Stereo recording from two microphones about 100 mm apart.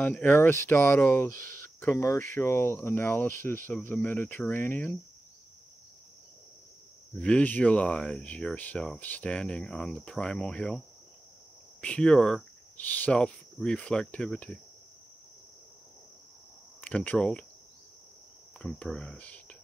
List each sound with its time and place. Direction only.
0.0 s speech: 15° left (ahead or behind)
7.2 s speech: 10° left (ahead or behind)
11.8 s speech: 10° left (ahead or behind)
16.8 s speech: 15° left (ahead or behind)
18.6 s speech: 10° left (ahead or behind)